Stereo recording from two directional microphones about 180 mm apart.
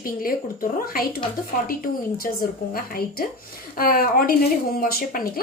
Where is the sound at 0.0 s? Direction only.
50° left (ahead or behind).